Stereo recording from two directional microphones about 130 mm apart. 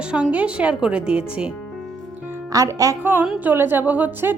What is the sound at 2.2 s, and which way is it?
Music, 20° right (ahead or behind).